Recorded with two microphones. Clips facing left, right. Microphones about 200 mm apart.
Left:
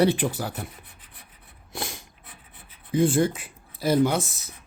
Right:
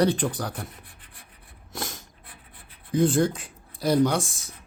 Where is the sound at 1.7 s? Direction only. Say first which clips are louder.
Left 1 dB; 10° left (ahead or behind).